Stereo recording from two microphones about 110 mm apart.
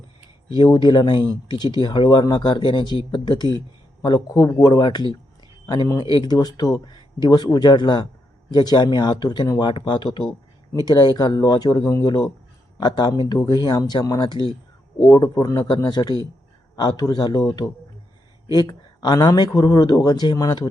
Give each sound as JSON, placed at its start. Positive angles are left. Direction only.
{"t": 0.4, "sound": "speech", "side_deg": 45}
{"t": 12.8, "sound": "speech", "side_deg": 40}
{"t": 18.4, "sound": "speech", "side_deg": 40}